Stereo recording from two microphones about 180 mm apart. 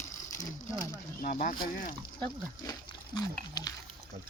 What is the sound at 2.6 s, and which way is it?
Speech, 20° left (ahead or behind).